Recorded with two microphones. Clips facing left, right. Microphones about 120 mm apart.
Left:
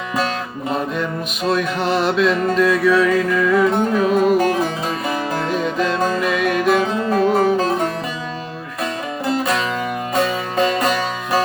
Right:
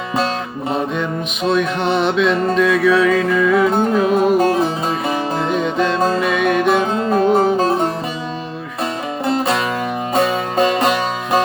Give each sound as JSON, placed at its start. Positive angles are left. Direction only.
{"t": 1.5, "sound": "music", "side_deg": 0}
{"t": 3.8, "sound": "music", "side_deg": -30}
{"t": 6.2, "sound": "music", "side_deg": 0}
{"t": 6.7, "sound": "music", "side_deg": -30}
{"t": 9.2, "sound": "music", "side_deg": -25}